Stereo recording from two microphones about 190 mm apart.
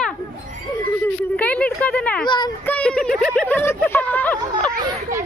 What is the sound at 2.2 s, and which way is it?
Speech, 25° left (ahead or behind).